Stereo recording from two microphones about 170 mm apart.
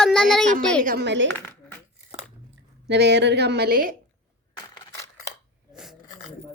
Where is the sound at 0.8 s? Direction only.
55° right (ahead or behind).